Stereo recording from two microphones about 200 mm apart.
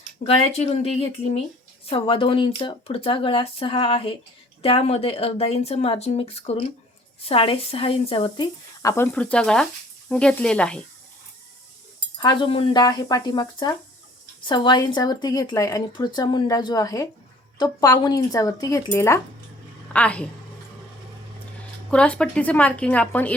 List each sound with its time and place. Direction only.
0.2 s speech: 30° left (ahead or behind); by 10.8 s 5° left (ahead or behind)
12.2 s speech: 25° left (ahead or behind); by 20.2 s 5° left (ahead or behind)
21.8 s speech: 5° left (ahead or behind)